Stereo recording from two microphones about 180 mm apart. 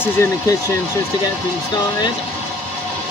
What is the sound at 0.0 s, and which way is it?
Speech, 15° left (ahead or behind).